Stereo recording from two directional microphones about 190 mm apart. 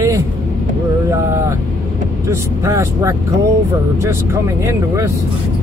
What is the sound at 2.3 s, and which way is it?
Speech, 15° right (ahead or behind).